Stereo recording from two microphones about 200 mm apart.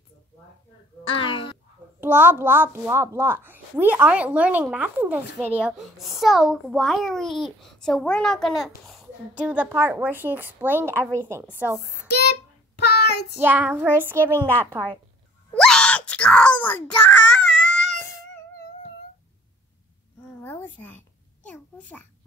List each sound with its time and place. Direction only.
1.1 s a child's voice: 25° left (ahead or behind)
2.0 s a child's voice: 10° right (ahead or behind)
13.4 s a child's voice: 10° right (ahead or behind)
14.3 s a woman's voice: 10° left (ahead or behind)
15.5 s a sound: 5° left (ahead or behind)
20.4 s babbling: 10° left (ahead or behind)
21.5 s a sound: 5° left (ahead or behind)